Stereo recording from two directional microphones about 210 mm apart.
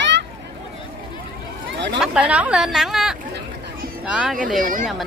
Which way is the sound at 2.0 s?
5° right (ahead or behind).